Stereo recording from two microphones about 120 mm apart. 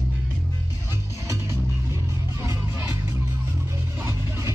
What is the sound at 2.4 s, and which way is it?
Music, 20° right (ahead or behind).